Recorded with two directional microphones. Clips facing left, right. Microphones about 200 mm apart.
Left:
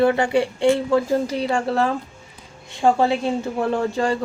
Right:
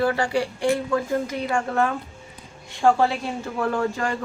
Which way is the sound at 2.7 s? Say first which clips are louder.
Left 2 dB; 20° left (ahead or behind).